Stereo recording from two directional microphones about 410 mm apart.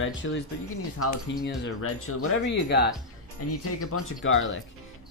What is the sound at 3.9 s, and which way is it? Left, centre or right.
Speech, left.